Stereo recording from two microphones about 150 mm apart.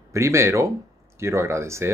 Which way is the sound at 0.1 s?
20° right (ahead or behind).